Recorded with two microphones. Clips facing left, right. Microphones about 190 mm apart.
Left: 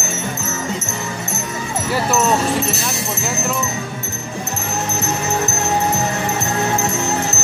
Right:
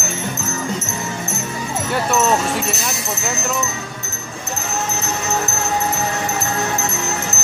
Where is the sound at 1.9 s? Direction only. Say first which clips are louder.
Even; centre (ahead or behind).